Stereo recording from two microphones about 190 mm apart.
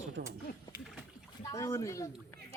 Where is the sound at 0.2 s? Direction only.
65° right (ahead or behind).